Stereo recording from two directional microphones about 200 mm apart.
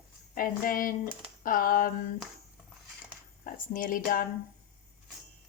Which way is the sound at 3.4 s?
45° left (ahead or behind).